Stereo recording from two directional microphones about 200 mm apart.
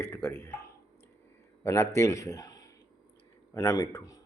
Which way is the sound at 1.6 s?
15° left (ahead or behind).